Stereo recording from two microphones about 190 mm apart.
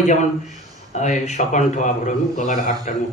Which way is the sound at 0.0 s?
35° left (ahead or behind).